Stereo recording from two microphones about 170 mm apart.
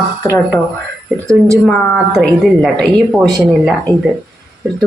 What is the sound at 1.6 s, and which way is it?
Speech, centre (ahead or behind).